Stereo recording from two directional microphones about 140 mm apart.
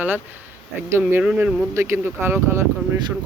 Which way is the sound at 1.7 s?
20° right (ahead or behind).